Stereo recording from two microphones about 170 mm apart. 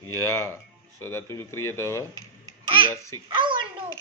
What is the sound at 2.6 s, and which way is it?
Baby laughter, 30° right (ahead or behind).